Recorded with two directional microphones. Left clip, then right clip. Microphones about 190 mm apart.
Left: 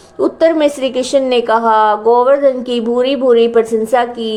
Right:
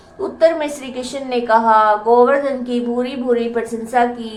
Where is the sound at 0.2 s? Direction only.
40° left (ahead or behind).